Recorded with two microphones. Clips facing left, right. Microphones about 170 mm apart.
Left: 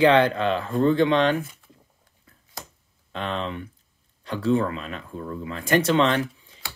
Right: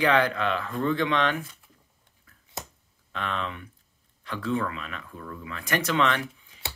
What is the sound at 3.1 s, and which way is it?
Speech, 30° left (ahead or behind).